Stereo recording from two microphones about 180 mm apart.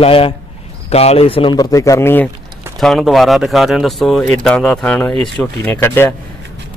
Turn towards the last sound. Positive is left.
turn(degrees=10)  # may be behind; listen again after turning